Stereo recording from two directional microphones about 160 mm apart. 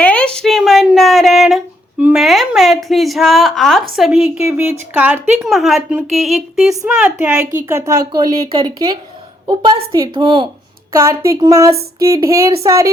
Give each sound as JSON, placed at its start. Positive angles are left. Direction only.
{"t": 0.0, "sound": "a woman's voice", "side_deg": 5}
{"t": 5.4, "sound": "a woman's voice", "side_deg": 0}
{"t": 10.9, "sound": "a woman's voice", "side_deg": -20}